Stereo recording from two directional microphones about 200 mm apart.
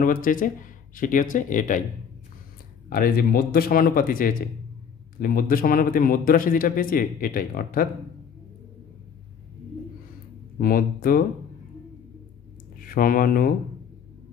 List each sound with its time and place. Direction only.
0.0 s a man's voice: 45° left (ahead or behind)
2.9 s a man's voice: 45° left (ahead or behind)
10.6 s a man's voice: 45° left (ahead or behind)
12.8 s speech: 45° left (ahead or behind)